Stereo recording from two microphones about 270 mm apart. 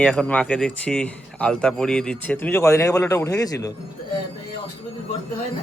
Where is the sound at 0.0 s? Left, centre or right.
Centre.